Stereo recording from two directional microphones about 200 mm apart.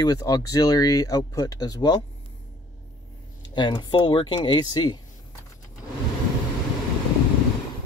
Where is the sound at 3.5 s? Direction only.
20° left (ahead or behind).